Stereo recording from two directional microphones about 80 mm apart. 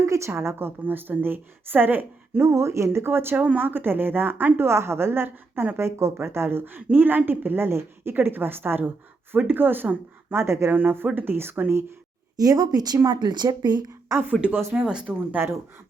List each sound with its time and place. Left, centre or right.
0.0 s a woman's voice: right
12.4 s speech: right
14.7 s a woman's voice: centre